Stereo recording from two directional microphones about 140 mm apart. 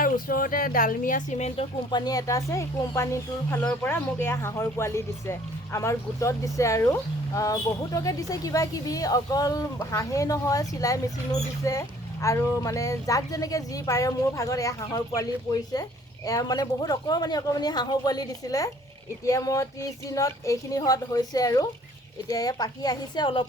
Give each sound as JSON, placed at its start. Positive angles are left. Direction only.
{"t": 0.0, "sound": "speech", "side_deg": 90}
{"t": 1.9, "sound": "speech", "side_deg": 30}